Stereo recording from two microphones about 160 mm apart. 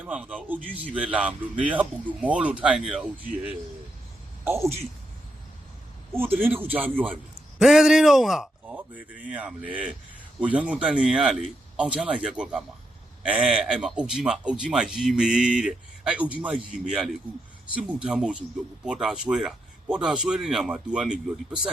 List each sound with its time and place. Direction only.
0.0 s speech: 5° right (ahead or behind)
4.4 s speech: 15° right (ahead or behind)
6.1 s speech: 10° right (ahead or behind)